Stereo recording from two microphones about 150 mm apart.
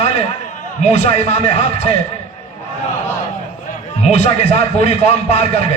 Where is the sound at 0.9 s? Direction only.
45° left (ahead or behind).